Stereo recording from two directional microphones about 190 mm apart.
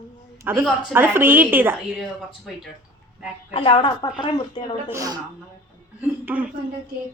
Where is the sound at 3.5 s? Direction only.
30° left (ahead or behind).